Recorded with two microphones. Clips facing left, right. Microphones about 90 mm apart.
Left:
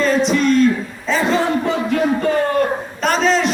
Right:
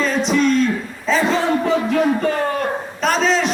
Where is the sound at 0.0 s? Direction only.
Centre (ahead or behind).